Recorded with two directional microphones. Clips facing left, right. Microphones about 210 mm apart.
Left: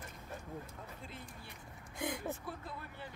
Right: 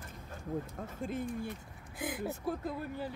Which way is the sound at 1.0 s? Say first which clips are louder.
Right 14 dB; 50° right (ahead or behind).